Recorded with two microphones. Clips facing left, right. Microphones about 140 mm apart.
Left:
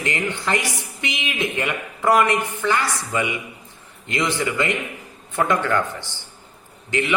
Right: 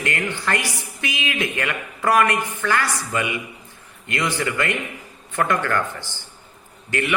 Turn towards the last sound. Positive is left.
turn(degrees=20)  # may be behind; listen again after turning